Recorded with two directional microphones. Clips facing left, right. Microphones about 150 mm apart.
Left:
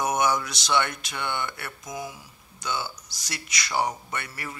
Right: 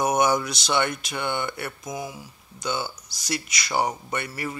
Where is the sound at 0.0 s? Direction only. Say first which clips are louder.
Right 3 dB; 15° right (ahead or behind).